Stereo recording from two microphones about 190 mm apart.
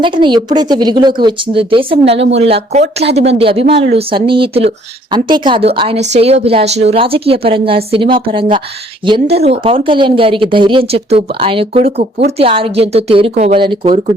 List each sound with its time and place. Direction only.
0.0 s a woman's voice: 25° right (ahead or behind)